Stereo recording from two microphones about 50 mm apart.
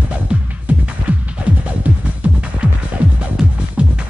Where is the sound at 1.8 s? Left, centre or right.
Right.